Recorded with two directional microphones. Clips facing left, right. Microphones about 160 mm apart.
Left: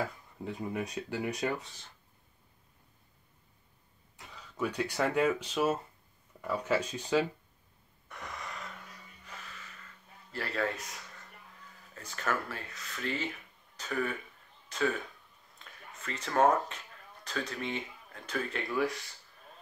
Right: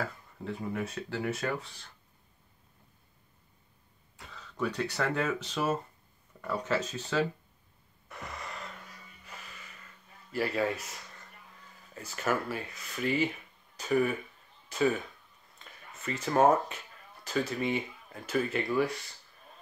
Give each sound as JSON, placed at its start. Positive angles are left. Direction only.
{"t": 0.0, "sound": "speech", "side_deg": 15}
{"t": 4.6, "sound": "speech", "side_deg": 10}
{"t": 8.1, "sound": "gasp", "side_deg": -5}
{"t": 10.3, "sound": "speech", "side_deg": -10}
{"t": 11.9, "sound": "speech", "side_deg": -10}
{"t": 15.6, "sound": "a sound", "side_deg": 0}
{"t": 16.0, "sound": "speech", "side_deg": -10}